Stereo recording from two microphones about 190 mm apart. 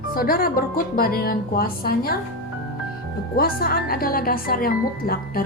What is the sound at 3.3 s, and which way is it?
A woman's voice, 50° left (ahead or behind).